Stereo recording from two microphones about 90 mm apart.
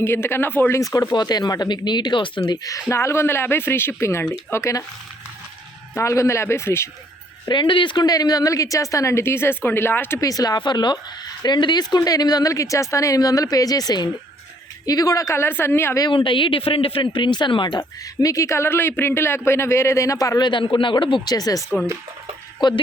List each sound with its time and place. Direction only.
0.0 s speech: 25° left (ahead or behind)
0.8 s a woman's voice: 40° left (ahead or behind)
1.1 s speech: 50° left (ahead or behind)
2.6 s speech: 35° left (ahead or behind)
5.9 s a woman's voice: 35° left (ahead or behind)
7.4 s speech: 60° left (ahead or behind)
8.1 s a woman's voice: 45° left (ahead or behind); by 10.2 s 25° left (ahead or behind)
10.2 s speech: 40° left (ahead or behind)
16.0 s speech: 70° left (ahead or behind)
17.7 s speech: 40° left (ahead or behind)
20.5 s speech: 65° left (ahead or behind)
21.3 s speech: 45° left (ahead or behind)
22.6 s speech: 55° left (ahead or behind)